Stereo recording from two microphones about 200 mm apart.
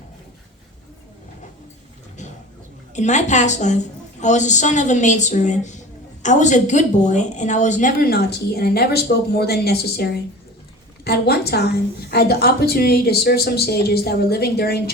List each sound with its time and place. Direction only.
2.9 s a woman's voice: 35° left (ahead or behind); by 14.9 s 50° left (ahead or behind)